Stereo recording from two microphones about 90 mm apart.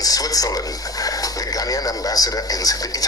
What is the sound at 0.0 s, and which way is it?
Speech, 40° left (ahead or behind).